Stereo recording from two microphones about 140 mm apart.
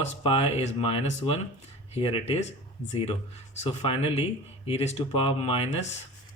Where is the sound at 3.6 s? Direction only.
45° left (ahead or behind).